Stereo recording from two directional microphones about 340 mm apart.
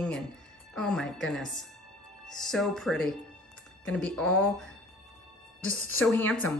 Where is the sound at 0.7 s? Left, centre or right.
Centre.